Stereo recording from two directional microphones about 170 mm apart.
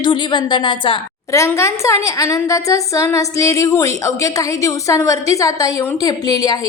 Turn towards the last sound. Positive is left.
turn(degrees=20)  # may be behind; listen again after turning